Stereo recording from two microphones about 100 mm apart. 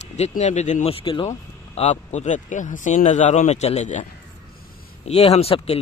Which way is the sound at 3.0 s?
90° left.